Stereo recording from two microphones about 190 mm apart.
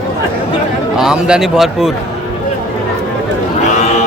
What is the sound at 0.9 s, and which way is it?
Speech, 5° right (ahead or behind).